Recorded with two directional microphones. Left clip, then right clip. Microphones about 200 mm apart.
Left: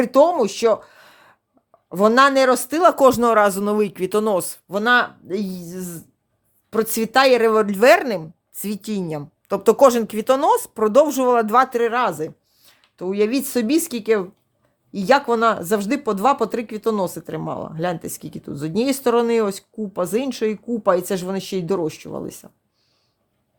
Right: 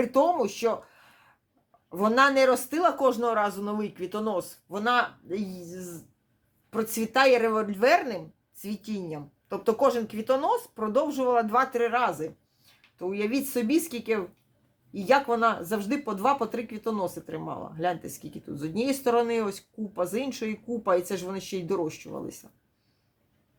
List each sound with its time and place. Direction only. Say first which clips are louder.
0.0 s speech: left 8 dB; 50° left (ahead or behind)